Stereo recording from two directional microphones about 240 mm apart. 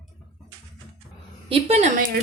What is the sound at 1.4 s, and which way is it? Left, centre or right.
Speech, right.